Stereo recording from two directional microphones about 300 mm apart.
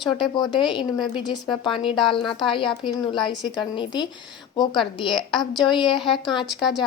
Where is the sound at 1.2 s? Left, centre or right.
Centre.